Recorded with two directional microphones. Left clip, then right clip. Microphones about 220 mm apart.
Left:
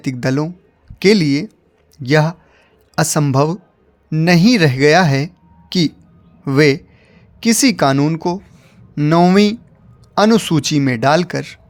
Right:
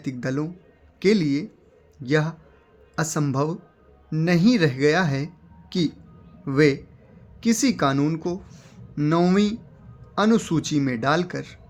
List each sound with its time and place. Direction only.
0.0 s speech: 45° left (ahead or behind)